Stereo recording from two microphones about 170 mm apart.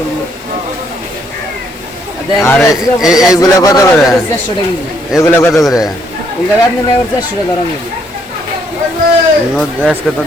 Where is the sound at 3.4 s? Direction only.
20° left (ahead or behind).